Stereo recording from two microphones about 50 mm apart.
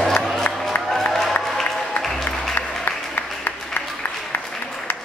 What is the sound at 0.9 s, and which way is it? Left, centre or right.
Applause, centre.